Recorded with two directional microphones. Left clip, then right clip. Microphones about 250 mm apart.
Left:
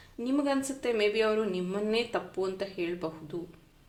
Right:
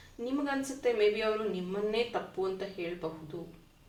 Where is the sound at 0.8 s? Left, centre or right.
Left.